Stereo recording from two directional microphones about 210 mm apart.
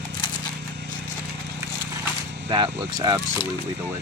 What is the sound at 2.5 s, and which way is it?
Speech, 20° right (ahead or behind).